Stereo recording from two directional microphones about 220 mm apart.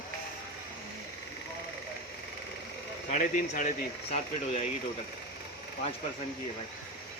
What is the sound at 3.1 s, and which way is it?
Speech, 35° left (ahead or behind).